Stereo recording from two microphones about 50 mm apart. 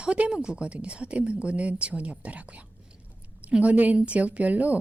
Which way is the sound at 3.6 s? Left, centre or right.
Right.